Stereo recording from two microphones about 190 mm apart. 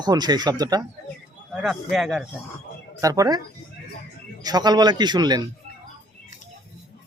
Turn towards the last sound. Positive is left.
turn(degrees=-20)  # may be behind; listen again after turning